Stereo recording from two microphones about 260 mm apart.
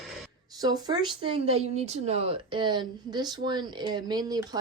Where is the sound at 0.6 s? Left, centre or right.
Centre.